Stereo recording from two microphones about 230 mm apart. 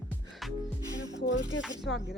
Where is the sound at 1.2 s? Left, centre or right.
Left.